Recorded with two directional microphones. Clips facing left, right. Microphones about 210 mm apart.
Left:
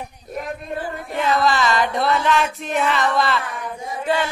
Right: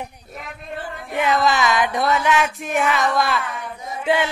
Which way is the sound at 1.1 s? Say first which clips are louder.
Even; 15° right (ahead or behind).